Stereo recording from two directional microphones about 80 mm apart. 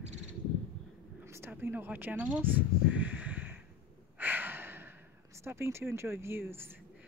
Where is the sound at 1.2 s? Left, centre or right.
Right.